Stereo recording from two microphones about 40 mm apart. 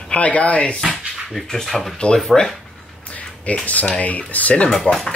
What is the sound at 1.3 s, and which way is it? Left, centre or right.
Speech, centre.